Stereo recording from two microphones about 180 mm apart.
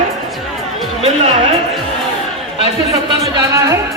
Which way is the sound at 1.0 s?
35° right (ahead or behind).